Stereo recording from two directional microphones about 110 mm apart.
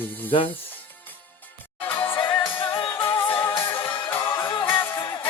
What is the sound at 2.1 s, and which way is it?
Music, 45° left (ahead or behind).